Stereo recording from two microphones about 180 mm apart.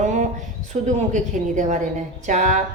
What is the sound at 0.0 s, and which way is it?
A woman's voice, 45° right (ahead or behind).